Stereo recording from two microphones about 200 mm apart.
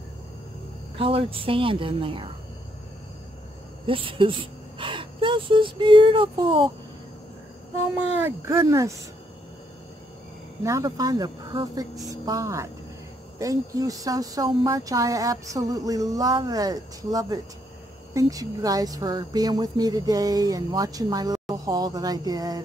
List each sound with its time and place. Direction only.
0.9 s a woman's voice: 30° right (ahead or behind)
3.8 s speech: 25° right (ahead or behind)
8.3 s speech: 15° right (ahead or behind)
10.6 s a woman's voice: 15° right (ahead or behind)